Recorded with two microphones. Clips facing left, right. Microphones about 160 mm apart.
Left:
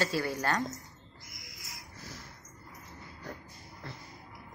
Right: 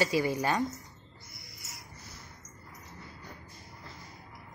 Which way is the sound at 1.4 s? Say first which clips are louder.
Left 1 dB; 90° left.